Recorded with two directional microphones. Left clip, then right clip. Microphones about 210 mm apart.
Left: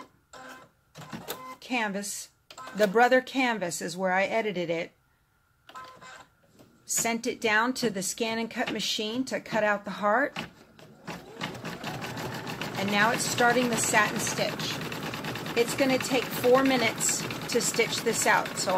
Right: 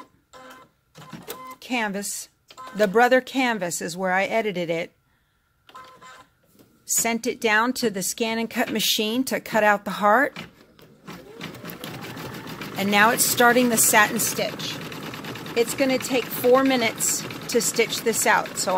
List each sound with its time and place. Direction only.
1.6 s speech: 55° right (ahead or behind)
7.0 s speech: 55° right (ahead or behind)
12.9 s speech: 55° right (ahead or behind)